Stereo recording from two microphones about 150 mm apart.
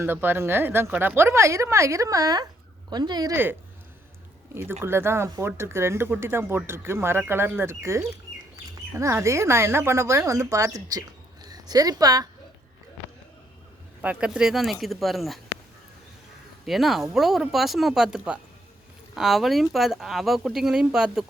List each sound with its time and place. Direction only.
0.0 s speech: 15° right (ahead or behind)
3.3 s speech: 15° right (ahead or behind)
4.8 s a woman's voice: 15° right (ahead or behind)
14.0 s speech: 10° right (ahead or behind)
16.6 s speech: centre (ahead or behind)